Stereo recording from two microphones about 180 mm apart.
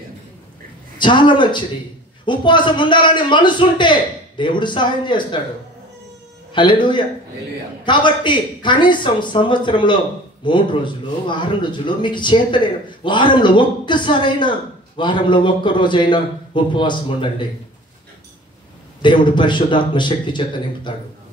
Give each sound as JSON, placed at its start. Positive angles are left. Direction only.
{"t": 0.9, "sound": "a man's voice", "side_deg": 25}
{"t": 6.5, "sound": "a man's voice", "side_deg": 25}
{"t": 19.0, "sound": "a man's voice", "side_deg": 25}